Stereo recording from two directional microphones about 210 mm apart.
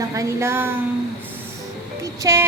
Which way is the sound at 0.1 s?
15° right (ahead or behind).